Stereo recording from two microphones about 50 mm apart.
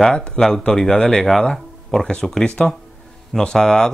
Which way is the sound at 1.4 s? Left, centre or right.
Centre.